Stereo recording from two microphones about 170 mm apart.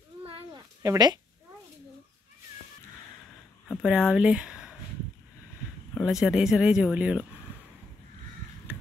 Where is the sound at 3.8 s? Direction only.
5° right (ahead or behind).